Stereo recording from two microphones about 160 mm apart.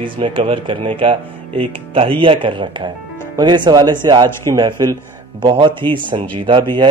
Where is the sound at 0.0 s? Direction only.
30° right (ahead or behind).